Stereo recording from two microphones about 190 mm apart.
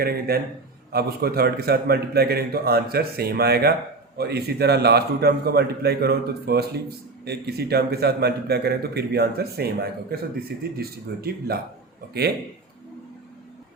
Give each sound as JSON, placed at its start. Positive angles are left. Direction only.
{"t": 0.0, "sound": "a man's voice", "side_deg": -55}